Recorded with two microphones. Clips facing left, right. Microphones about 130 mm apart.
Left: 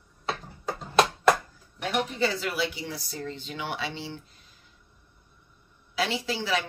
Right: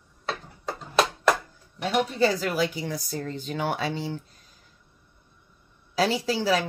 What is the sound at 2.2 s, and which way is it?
Speech, 40° right (ahead or behind).